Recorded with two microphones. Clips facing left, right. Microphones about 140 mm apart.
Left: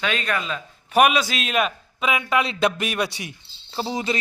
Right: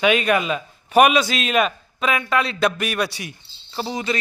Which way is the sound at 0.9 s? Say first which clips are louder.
Right 3 dB; centre (ahead or behind).